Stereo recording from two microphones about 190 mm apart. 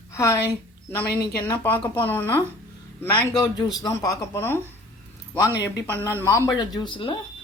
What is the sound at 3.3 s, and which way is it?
Speech, 20° left (ahead or behind).